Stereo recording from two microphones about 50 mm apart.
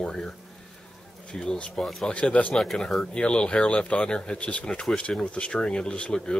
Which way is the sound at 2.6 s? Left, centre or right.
Centre.